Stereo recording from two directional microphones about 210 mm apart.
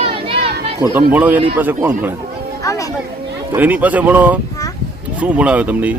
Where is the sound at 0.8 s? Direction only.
10° right (ahead or behind).